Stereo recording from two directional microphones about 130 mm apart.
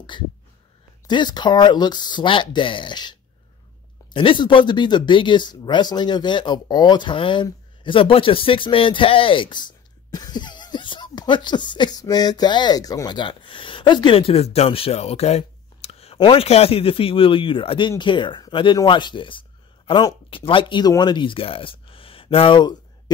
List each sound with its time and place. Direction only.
0.1 s speech: 40° left (ahead or behind)